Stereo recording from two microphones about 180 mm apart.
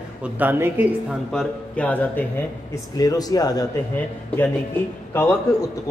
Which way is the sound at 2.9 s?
20° left (ahead or behind).